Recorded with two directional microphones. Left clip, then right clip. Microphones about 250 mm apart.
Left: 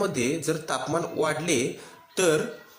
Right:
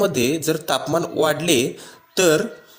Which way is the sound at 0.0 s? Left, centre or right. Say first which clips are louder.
Right 7 dB; right.